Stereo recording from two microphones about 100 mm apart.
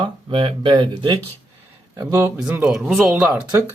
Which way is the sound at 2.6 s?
5° right (ahead or behind).